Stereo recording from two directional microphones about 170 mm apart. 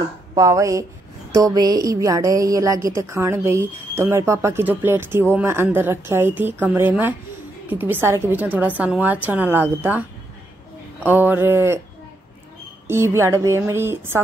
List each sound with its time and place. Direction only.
0.4 s a woman's voice: 20° right (ahead or behind)
11.1 s a woman's voice: 10° right (ahead or behind)
12.8 s a woman's voice: 15° right (ahead or behind)